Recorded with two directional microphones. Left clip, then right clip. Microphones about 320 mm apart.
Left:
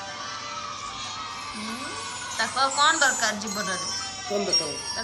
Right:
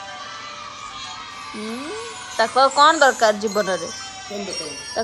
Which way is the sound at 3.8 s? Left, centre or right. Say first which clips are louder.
Right 1 dB; left.